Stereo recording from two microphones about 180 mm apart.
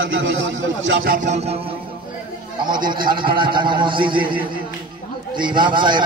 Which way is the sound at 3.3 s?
25° right (ahead or behind).